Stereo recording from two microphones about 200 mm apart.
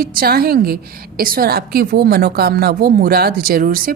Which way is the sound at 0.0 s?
45° right (ahead or behind).